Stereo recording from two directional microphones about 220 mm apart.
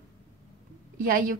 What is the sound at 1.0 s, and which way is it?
Speech, 40° right (ahead or behind).